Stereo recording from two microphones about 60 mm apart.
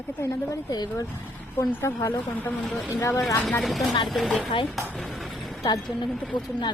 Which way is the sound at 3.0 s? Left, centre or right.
Left.